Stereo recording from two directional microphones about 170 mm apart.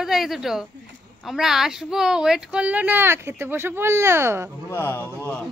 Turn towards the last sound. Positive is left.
turn(degrees=15)  # may be behind; listen again after turning